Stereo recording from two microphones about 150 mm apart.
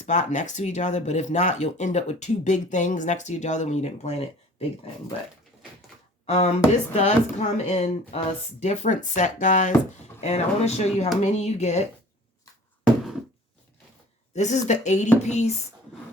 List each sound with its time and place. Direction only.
0.0 s speech: 55° left (ahead or behind)
6.2 s speech: 45° left (ahead or behind)
14.3 s speech: 50° left (ahead or behind)